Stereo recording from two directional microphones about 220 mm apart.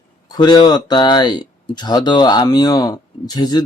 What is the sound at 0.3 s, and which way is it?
Speech, 20° left (ahead or behind).